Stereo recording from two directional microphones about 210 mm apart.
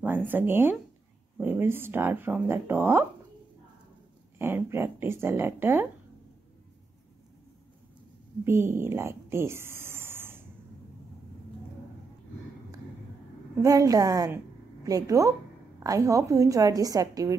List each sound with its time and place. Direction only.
0.3 s speech: 10° right (ahead or behind)
4.4 s speech: 10° right (ahead or behind)
8.5 s speech: 10° right (ahead or behind)
13.6 s a woman's voice: 15° right (ahead or behind)